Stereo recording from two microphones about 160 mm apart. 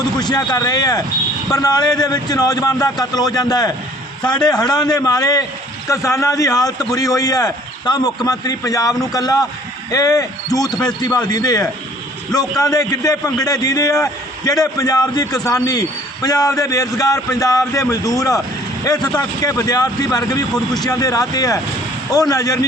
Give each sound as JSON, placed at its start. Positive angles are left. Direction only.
{"t": 0.2, "sound": "a man's voice", "side_deg": 25}
{"t": 10.7, "sound": "speech", "side_deg": 5}
{"t": 11.3, "sound": "a man's voice", "side_deg": 25}